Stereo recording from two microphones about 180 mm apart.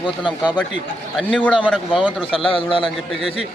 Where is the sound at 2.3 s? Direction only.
30° left (ahead or behind).